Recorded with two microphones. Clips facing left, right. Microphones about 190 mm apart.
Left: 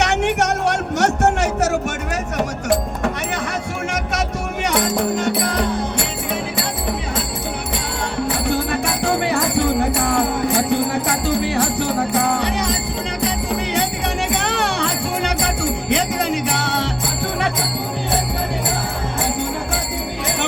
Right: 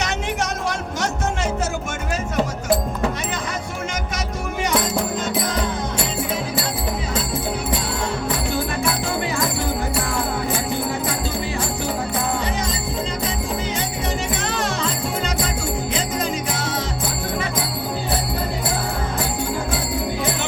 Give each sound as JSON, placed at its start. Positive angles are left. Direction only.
{"t": 0.0, "sound": "music", "side_deg": 70}
{"t": 9.0, "sound": "jingle bell", "side_deg": 65}
{"t": 10.7, "sound": "music", "side_deg": 65}
{"t": 14.3, "sound": "music", "side_deg": 70}